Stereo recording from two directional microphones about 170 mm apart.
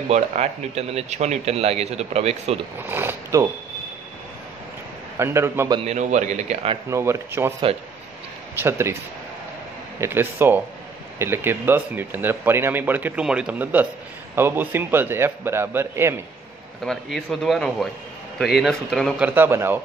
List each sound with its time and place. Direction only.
0.1 s speech: 40° right (ahead or behind)
2.8 s speech: 15° right (ahead or behind)
5.2 s speech: 15° right (ahead or behind)
5.8 s speech: 45° right (ahead or behind)
6.9 s speech: 15° right (ahead or behind)
8.5 s speech: 15° right (ahead or behind)
9.9 s speech: 15° right (ahead or behind)
16.8 s speech: centre (ahead or behind)
19.2 s speech: 10° right (ahead or behind)